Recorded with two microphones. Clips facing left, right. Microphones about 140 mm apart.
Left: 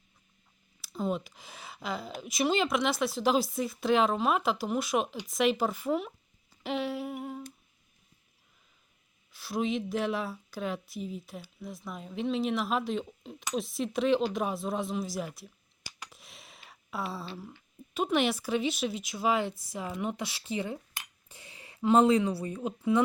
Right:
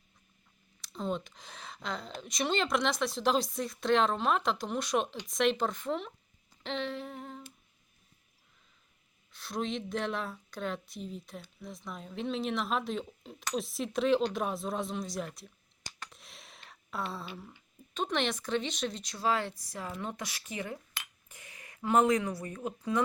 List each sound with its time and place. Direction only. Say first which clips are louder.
0.8 s speech: left 3 dB; 5° left (ahead or behind)
6.6 s humming: left 4 dB; 10° left (ahead or behind)
9.3 s a woman's voice: left 4 dB; 5° left (ahead or behind)
19.2 s speech: left 2 dB; 15° left (ahead or behind)
21.2 s a sound: left 2 dB; 30° left (ahead or behind)
21.8 s speech: left 4 dB; 25° left (ahead or behind)
22.5 s speech: left 4 dB; 15° left (ahead or behind)